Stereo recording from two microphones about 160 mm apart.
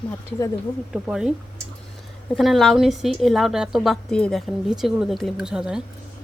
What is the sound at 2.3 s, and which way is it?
A woman's voice, centre (ahead or behind).